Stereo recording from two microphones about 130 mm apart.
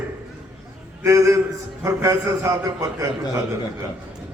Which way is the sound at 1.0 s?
25° right (ahead or behind).